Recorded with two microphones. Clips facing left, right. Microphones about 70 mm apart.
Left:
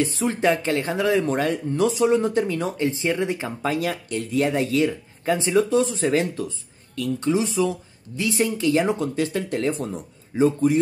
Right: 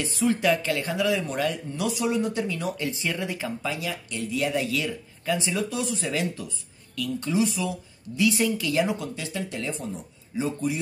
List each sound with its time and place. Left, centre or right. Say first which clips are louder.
0.0 s speech: left 3 dB; left
3.6 s speech: left 6 dB; left